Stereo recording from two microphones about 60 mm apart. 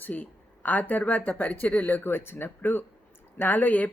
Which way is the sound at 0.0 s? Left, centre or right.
Left.